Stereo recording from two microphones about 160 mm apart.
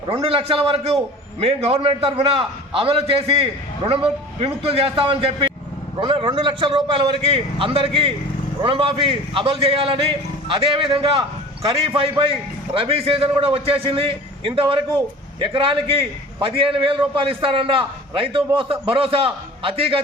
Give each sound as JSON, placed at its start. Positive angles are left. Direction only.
{"t": 0.1, "sound": "a man's voice", "side_deg": -35}